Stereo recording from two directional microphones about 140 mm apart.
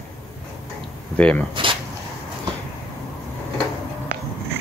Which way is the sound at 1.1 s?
10° left (ahead or behind).